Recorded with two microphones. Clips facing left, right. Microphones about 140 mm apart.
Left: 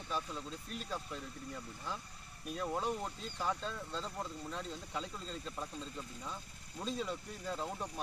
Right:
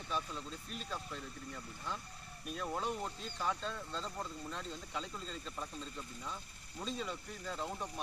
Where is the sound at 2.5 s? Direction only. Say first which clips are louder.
Left 2 dB; 5° left (ahead or behind).